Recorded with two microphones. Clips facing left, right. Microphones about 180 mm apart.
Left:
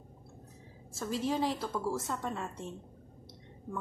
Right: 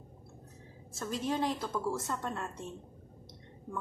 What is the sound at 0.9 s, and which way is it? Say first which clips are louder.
A woman's voice: left 1 dB; 5° left (ahead or behind).